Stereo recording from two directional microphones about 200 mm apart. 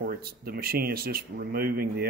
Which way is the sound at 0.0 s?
50° right (ahead or behind).